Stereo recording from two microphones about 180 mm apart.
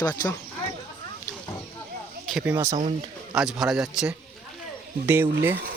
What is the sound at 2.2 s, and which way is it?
Speech, 5° right (ahead or behind).